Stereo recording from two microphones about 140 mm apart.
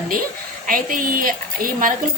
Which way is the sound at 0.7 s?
80° right.